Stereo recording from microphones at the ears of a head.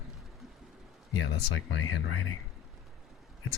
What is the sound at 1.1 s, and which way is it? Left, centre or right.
Speech, left.